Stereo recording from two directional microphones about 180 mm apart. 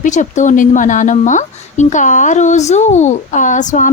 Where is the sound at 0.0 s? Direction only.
45° left (ahead or behind).